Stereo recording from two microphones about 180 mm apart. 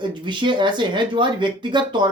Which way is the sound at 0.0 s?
25° right (ahead or behind).